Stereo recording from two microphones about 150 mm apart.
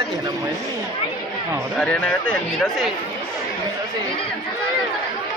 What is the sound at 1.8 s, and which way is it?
Speech, 5° left (ahead or behind).